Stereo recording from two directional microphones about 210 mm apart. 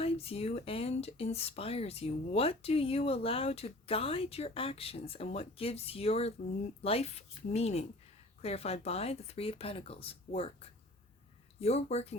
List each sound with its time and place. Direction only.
0.0 s speech: 30° left (ahead or behind)